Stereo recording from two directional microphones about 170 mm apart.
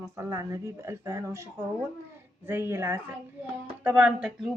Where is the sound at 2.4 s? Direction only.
15° right (ahead or behind).